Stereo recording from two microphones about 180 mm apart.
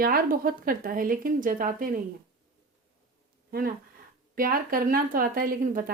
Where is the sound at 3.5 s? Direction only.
55° right (ahead or behind).